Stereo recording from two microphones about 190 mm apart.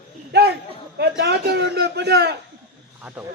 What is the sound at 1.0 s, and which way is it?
Speech, 60° right (ahead or behind).